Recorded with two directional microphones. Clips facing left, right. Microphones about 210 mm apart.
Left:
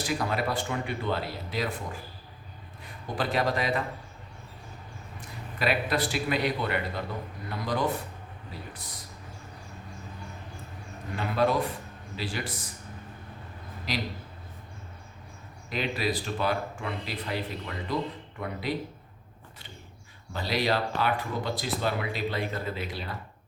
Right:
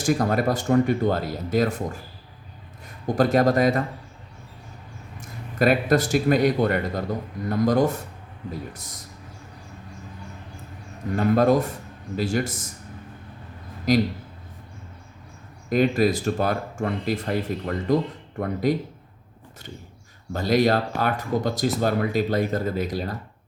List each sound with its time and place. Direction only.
0.0 s a man's voice: 45° right (ahead or behind)
5.5 s speech: 45° right (ahead or behind)
11.1 s speech: 45° right (ahead or behind)
13.9 s speech: 45° right (ahead or behind)
15.7 s speech: 45° right (ahead or behind)
20.3 s speech: 45° right (ahead or behind)